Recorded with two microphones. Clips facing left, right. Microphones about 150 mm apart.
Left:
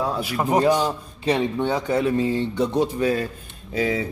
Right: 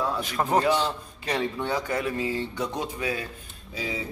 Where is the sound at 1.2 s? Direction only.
25° left (ahead or behind).